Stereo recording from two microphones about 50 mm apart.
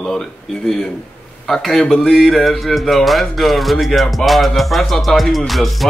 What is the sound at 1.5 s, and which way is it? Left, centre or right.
Music, centre.